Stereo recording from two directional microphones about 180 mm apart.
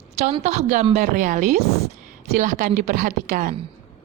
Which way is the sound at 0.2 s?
35° right (ahead or behind).